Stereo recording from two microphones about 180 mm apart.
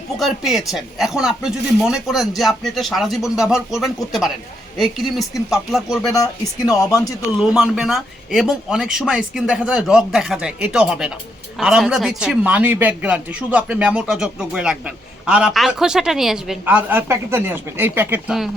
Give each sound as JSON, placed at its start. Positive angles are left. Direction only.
{"t": 0.2, "sound": "speech", "side_deg": 0}
{"t": 6.7, "sound": "speech", "side_deg": 20}
{"t": 7.3, "sound": "speech", "side_deg": 0}